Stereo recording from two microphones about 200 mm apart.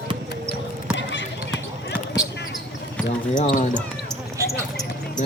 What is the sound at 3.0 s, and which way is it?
Basketball bounce, 5° left (ahead or behind).